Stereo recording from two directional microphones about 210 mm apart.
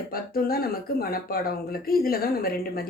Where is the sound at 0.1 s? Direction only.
45° left (ahead or behind).